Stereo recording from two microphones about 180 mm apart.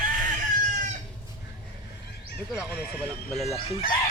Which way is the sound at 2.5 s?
5° left (ahead or behind).